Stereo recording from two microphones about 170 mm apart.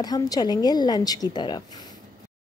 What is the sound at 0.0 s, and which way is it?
A woman's voice, 25° left (ahead or behind).